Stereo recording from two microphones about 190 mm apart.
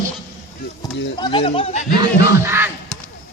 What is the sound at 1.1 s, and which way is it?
Speech, 25° left (ahead or behind).